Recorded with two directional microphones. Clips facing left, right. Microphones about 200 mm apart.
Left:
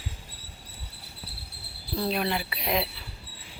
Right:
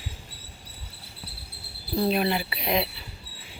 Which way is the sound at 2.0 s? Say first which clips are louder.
Right 3 dB; 5° right (ahead or behind).